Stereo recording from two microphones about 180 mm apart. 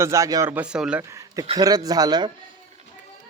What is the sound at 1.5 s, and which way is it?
Speech, 20° right (ahead or behind).